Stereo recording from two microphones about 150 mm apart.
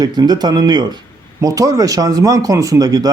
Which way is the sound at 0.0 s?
25° right (ahead or behind).